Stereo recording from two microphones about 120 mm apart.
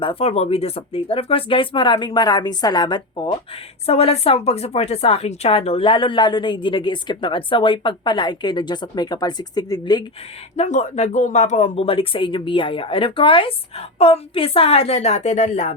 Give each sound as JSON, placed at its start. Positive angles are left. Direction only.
{"t": 0.0, "sound": "speech", "side_deg": 50}
{"t": 3.8, "sound": "speech", "side_deg": 55}
{"t": 10.6, "sound": "speech", "side_deg": 75}